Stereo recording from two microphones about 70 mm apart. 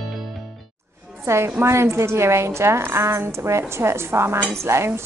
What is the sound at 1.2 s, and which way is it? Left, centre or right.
A woman's voice, right.